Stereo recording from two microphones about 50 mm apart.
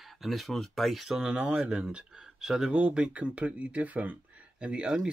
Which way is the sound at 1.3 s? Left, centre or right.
Right.